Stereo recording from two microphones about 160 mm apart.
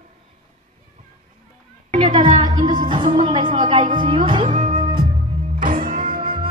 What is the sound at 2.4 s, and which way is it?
Speech, 25° right (ahead or behind).